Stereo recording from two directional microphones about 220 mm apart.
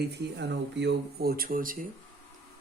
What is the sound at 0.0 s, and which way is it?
Speech, 50° right (ahead or behind).